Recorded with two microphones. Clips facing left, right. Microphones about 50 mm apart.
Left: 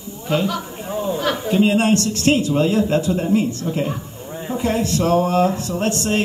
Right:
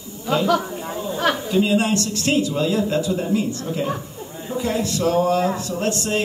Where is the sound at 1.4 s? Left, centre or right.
Left.